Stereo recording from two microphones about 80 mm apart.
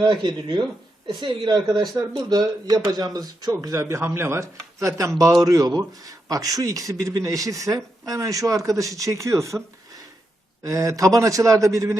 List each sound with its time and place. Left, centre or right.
0.0 s speech: right
10.6 s speech: right